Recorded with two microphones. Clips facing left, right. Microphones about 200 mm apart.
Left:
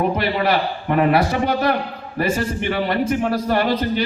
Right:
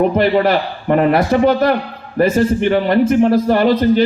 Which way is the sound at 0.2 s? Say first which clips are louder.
Right 6 dB; 50° right (ahead or behind).